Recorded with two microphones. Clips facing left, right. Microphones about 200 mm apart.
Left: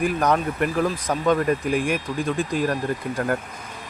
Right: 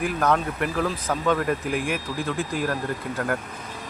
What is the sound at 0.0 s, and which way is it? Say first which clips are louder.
Speech: left 2 dB; 15° left (ahead or behind).